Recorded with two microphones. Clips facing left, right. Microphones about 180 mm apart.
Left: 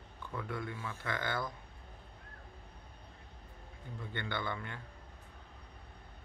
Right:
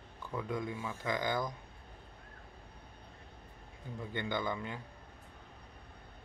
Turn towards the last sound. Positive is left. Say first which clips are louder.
# right 3 dB
turn(degrees=-15)  # may be behind; listen again after turning